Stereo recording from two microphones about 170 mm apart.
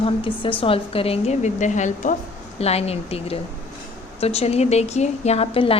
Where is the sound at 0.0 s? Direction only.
30° left (ahead or behind).